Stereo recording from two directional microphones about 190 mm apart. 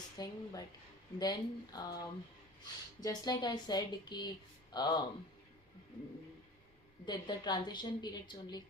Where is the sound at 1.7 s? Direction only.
20° left (ahead or behind).